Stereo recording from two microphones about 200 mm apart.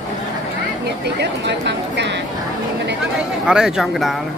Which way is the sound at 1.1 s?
60° right (ahead or behind).